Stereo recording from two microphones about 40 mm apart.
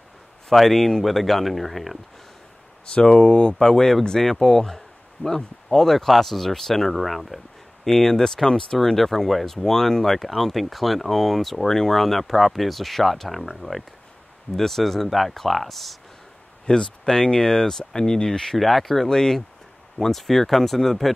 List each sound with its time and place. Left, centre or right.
0.6 s speech: centre
3.2 s speech: left
3.5 s speech: centre
8.7 s speech: centre
16.6 s speech: centre
18.6 s speech: centre
19.0 s speech: centre